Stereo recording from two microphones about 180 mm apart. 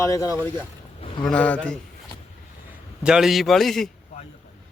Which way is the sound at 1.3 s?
5° left (ahead or behind).